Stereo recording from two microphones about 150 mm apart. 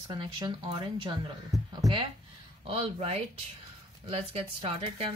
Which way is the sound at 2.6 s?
40° right (ahead or behind).